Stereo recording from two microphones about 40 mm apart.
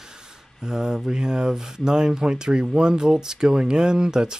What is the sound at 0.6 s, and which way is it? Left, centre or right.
Speech, centre.